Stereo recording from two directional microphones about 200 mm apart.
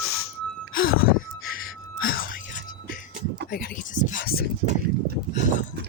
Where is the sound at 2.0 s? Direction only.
45° left (ahead or behind).